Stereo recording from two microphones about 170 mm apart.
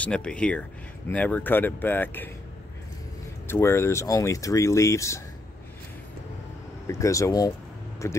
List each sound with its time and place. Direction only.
0.0 s speech: 5° left (ahead or behind)
3.4 s speech: 15° left (ahead or behind)
6.9 s speech: 20° left (ahead or behind)